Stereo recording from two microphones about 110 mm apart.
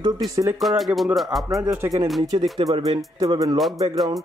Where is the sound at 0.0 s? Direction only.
35° right (ahead or behind).